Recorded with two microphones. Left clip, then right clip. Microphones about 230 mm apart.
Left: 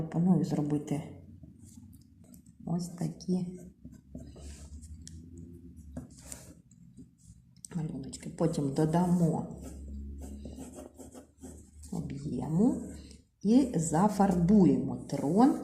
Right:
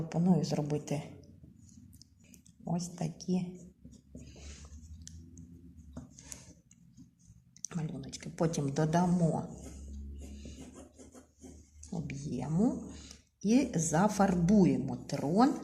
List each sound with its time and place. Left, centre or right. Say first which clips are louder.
0.1 s speech: left 1 dB; right
2.6 s speech: even; right
7.6 s speech: left 1 dB; right
12.3 s speech: left 3 dB; right